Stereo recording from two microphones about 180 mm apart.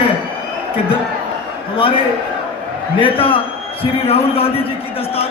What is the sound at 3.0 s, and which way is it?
A man's voice, 30° left (ahead or behind).